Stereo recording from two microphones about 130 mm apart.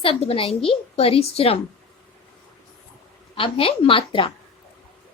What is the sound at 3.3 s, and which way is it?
A woman's voice, 45° left (ahead or behind).